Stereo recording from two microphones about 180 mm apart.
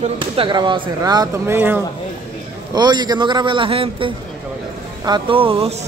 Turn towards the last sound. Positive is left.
turn(degrees=-35)  # may be behind; listen again after turning